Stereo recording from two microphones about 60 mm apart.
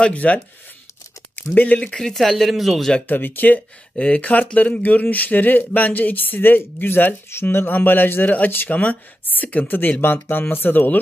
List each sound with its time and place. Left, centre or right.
0.0 s speech: left
2.0 s speech: centre
3.1 s speech: left